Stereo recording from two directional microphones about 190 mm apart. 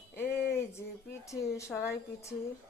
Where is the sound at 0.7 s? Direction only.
15° left (ahead or behind).